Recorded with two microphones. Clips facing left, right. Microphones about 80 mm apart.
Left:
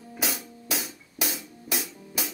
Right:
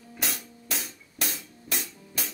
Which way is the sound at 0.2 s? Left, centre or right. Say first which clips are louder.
Left 3 dB; centre.